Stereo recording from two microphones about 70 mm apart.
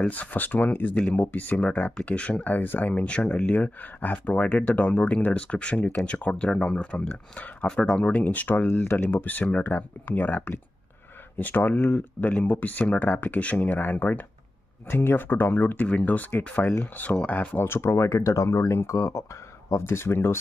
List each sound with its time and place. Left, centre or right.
0.1 s speech: left
17.7 s speech: left